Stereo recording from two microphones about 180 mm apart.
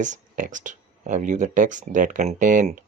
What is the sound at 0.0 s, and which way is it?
Speech, 45° right (ahead or behind).